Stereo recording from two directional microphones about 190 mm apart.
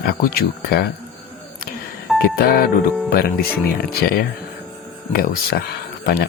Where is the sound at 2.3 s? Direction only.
55° left (ahead or behind).